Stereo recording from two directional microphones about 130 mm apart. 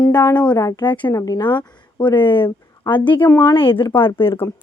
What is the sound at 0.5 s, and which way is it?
Speech, 25° left (ahead or behind).